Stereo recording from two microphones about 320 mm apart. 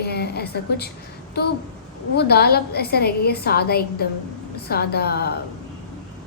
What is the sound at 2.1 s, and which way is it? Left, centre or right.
A woman's voice, left.